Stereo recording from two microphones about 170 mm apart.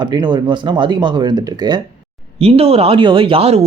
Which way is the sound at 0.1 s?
25° right (ahead or behind).